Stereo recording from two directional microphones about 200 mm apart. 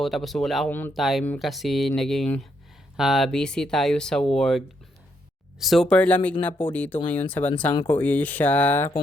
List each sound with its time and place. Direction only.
0.0 s speech: centre (ahead or behind)